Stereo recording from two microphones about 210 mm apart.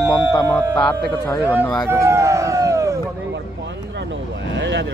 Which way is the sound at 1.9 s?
15° right (ahead or behind).